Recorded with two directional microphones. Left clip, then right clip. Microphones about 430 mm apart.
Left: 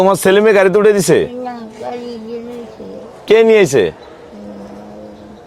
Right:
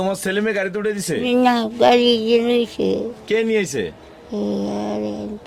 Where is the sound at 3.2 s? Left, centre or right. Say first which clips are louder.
Left 13 dB; left.